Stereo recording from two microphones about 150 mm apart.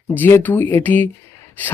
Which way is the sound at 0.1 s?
15° left (ahead or behind).